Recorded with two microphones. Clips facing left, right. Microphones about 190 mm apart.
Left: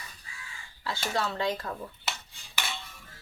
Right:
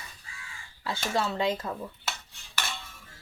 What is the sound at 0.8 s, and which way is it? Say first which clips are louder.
Speech: right 2 dB; 20° right (ahead or behind).